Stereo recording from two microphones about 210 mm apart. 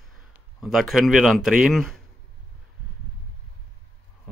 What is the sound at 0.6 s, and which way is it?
A man's voice, centre (ahead or behind).